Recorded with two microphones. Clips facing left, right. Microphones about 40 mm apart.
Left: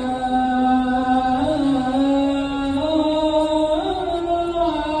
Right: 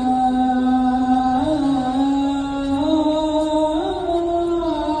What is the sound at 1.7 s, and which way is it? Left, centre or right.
Music, left.